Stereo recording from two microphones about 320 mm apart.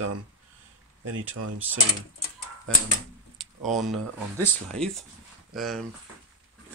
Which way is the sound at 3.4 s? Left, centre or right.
Centre.